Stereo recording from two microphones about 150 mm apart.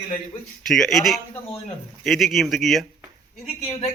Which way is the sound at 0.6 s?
Centre (ahead or behind).